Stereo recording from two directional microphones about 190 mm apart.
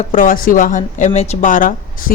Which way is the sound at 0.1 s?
45° left (ahead or behind).